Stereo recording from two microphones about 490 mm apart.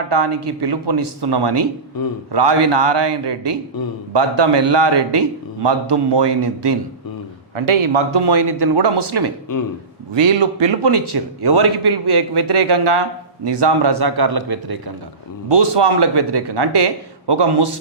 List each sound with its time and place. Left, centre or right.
0.3 s a man's voice: right
2.0 s a man's voice: left
2.3 s a man's voice: right
7.5 s a man's voice: right
15.4 s a man's voice: right